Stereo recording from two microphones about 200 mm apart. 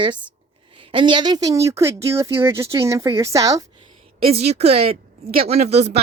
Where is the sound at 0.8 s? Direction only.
25° right (ahead or behind).